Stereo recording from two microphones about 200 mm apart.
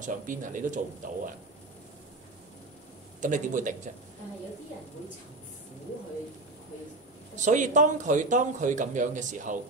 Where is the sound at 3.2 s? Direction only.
40° right (ahead or behind).